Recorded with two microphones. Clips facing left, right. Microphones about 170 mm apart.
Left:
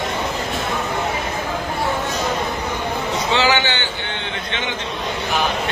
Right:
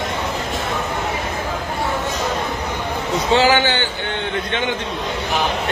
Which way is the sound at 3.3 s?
45° right (ahead or behind).